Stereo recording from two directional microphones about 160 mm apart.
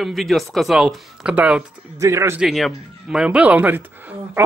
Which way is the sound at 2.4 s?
Centre (ahead or behind).